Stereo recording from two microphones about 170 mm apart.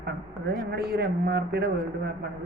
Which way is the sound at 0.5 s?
65° right (ahead or behind).